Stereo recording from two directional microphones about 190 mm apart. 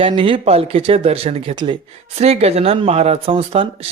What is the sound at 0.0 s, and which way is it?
Speech, 25° right (ahead or behind).